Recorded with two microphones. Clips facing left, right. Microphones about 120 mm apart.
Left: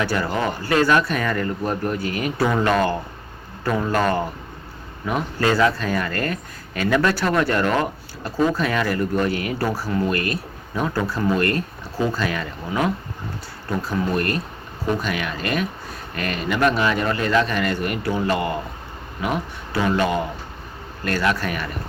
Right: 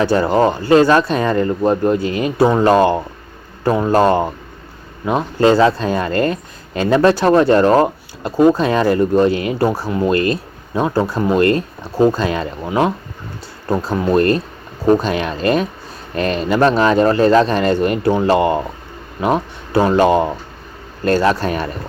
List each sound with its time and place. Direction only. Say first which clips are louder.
0.0 s speech: right 9 dB; 25° right (ahead or behind)